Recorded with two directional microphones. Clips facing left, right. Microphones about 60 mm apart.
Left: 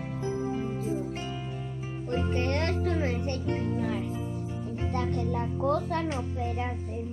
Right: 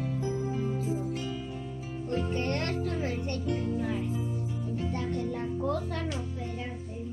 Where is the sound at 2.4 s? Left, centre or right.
Left.